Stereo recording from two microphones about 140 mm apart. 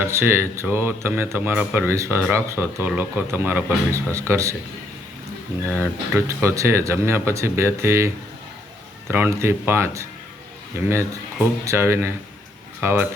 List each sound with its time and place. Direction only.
0.0 s speech: 15° right (ahead or behind)
5.6 s speech: 15° right (ahead or behind)